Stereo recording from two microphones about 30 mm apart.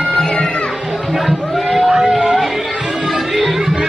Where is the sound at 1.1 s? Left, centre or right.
Centre.